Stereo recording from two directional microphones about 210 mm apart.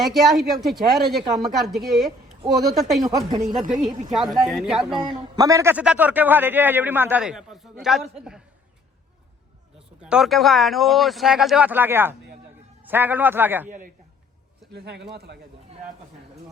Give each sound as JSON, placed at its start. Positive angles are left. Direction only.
{"t": 0.0, "sound": "speech", "side_deg": 0}
{"t": 3.0, "sound": "a man's voice", "side_deg": -20}
{"t": 3.6, "sound": "a man's voice", "side_deg": -40}
{"t": 4.1, "sound": "speech", "side_deg": 0}
{"t": 4.9, "sound": "a man's voice", "side_deg": -20}
{"t": 10.0, "sound": "a man's voice", "side_deg": -5}
{"t": 13.7, "sound": "a man's voice", "side_deg": -40}
{"t": 14.7, "sound": "speech", "side_deg": -50}